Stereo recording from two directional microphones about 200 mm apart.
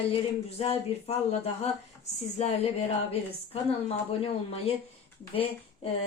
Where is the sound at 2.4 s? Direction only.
35° left (ahead or behind).